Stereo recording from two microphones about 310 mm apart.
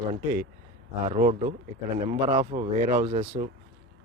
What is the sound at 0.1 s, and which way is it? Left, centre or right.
Speech, right.